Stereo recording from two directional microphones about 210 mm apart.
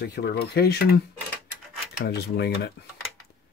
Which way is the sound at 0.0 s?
50° left (ahead or behind).